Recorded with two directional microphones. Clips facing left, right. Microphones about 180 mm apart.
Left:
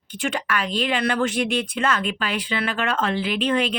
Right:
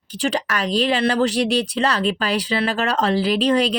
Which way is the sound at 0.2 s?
35° right (ahead or behind).